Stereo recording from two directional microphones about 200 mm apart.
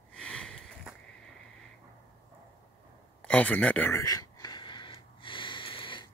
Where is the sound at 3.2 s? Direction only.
5° left (ahead or behind).